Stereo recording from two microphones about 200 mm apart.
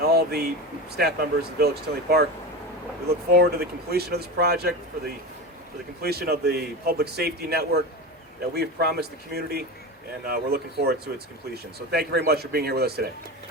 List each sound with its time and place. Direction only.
0.0 s a sound: 50° right (ahead or behind)
0.9 s a man's voice: 50° right (ahead or behind)
3.3 s a man's voice: 50° right (ahead or behind)